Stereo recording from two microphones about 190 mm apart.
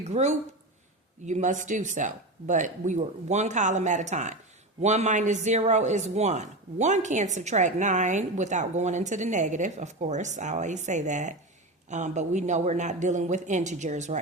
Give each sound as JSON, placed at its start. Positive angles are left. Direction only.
{"t": 0.0, "sound": "speech", "side_deg": -35}